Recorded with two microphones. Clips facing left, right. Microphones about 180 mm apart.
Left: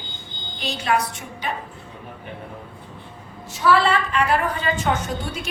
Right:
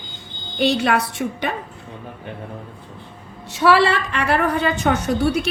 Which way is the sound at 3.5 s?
75° right (ahead or behind).